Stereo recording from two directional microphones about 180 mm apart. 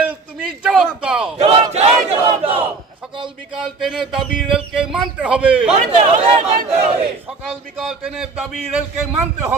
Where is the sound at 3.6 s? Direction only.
Centre (ahead or behind).